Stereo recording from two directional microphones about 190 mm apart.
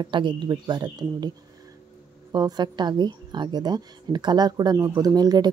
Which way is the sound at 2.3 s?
20° right (ahead or behind).